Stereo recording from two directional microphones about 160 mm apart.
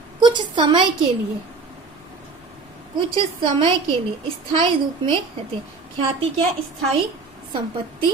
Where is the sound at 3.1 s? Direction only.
35° right (ahead or behind).